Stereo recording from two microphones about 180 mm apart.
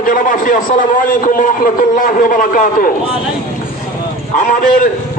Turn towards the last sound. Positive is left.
turn(degrees=45)  # may be behind; listen again after turning